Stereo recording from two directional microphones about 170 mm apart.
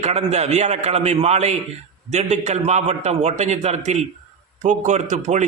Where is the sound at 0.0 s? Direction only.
40° right (ahead or behind).